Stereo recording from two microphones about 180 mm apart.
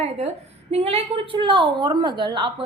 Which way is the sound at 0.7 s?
35° right (ahead or behind).